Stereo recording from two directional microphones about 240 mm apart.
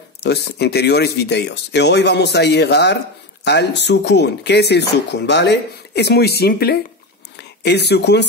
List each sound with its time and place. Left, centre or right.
0.2 s speech: left